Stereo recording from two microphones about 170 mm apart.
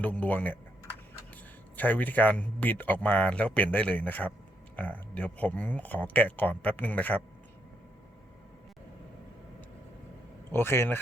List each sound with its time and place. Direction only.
0.0 s speech: 10° left (ahead or behind)
1.7 s speech: 10° left (ahead or behind)
10.5 s speech: 15° left (ahead or behind)